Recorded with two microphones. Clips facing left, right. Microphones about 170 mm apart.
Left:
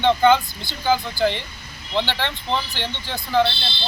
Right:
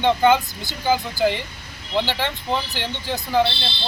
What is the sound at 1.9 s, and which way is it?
Speech, 5° right (ahead or behind).